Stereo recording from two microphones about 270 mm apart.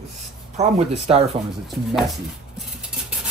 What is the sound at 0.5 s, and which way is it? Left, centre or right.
Speech, right.